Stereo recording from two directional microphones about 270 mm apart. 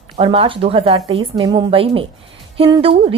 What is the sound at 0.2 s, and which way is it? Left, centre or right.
A woman's voice, centre.